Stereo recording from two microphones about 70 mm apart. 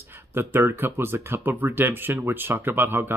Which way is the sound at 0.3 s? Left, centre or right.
Right.